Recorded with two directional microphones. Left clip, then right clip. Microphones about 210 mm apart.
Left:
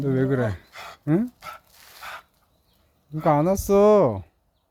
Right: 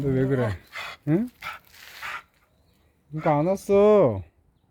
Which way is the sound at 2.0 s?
40° left (ahead or behind).